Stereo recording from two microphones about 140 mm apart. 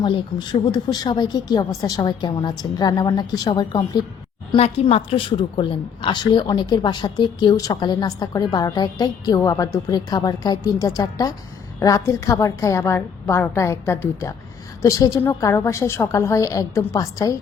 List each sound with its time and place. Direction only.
0.0 s a woman's voice: 35° left (ahead or behind)
4.5 s a woman's voice: 50° left (ahead or behind); by 17.3 s 20° left (ahead or behind)